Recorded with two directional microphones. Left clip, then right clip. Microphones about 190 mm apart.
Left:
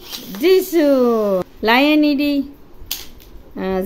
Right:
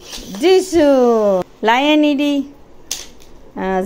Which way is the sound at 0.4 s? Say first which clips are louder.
Right 2 dB; 5° left (ahead or behind).